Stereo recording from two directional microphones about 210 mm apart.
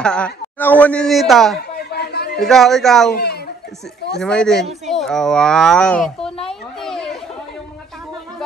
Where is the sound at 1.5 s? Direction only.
50° left (ahead or behind).